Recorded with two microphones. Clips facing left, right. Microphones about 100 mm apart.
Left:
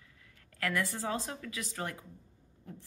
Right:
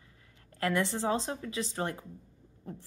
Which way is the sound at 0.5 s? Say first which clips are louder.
Right 4 dB; 25° right (ahead or behind).